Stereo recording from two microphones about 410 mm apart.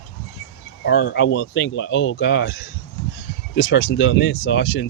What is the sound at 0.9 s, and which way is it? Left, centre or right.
Speech, left.